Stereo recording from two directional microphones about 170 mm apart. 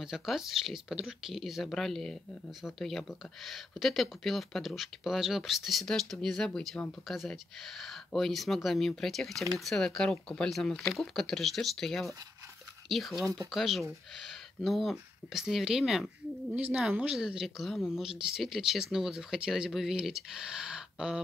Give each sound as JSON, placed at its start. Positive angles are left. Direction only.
{"t": 0.0, "sound": "speech", "side_deg": 0}